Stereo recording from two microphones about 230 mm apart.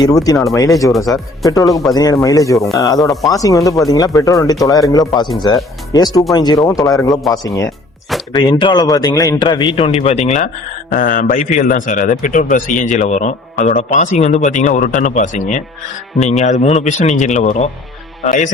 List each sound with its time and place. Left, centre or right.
0.0 s speech: centre
3.0 s speech: centre
3.2 s a man's voice: centre; by 18.4 s left